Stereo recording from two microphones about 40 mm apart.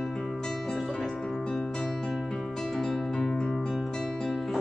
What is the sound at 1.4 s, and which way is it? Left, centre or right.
Music, left.